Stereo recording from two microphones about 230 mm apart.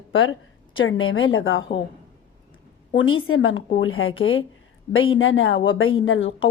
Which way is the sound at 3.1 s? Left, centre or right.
Left.